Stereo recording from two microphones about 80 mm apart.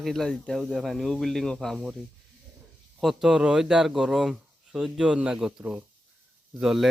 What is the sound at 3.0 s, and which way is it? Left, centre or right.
Speech, centre.